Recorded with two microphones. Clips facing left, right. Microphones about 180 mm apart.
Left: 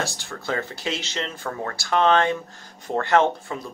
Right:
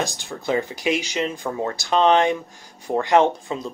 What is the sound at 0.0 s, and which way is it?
Speech, 15° right (ahead or behind).